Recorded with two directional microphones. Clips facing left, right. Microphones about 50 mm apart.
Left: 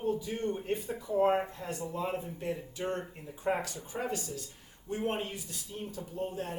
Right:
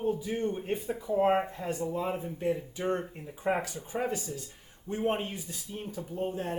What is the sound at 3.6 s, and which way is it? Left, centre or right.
Speech, right.